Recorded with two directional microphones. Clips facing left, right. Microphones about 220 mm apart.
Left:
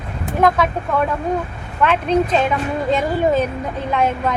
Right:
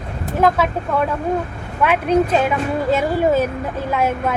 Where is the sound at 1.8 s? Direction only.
10° right (ahead or behind).